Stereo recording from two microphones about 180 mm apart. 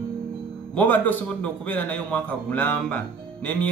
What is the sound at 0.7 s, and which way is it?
A man's voice, 10° left (ahead or behind).